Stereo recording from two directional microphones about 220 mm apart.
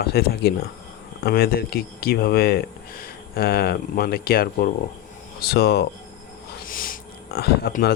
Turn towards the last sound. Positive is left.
turn(degrees=45)  # may be behind; listen again after turning